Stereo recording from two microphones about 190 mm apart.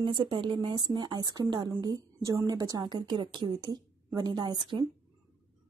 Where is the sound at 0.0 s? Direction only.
25° right (ahead or behind).